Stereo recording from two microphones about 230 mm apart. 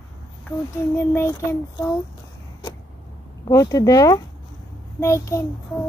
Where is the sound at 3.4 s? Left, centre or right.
Centre.